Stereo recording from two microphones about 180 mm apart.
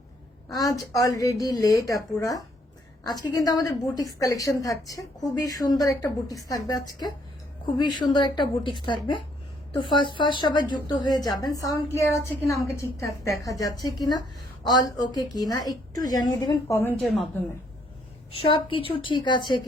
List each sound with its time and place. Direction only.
0.5 s a woman's voice: 20° left (ahead or behind)
7.9 s a woman's voice: 25° left (ahead or behind)
17.0 s a woman's voice: centre (ahead or behind)
18.3 s a woman's voice: 30° left (ahead or behind)